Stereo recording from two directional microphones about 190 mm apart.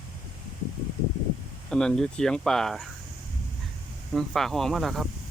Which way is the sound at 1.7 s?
5° left (ahead or behind).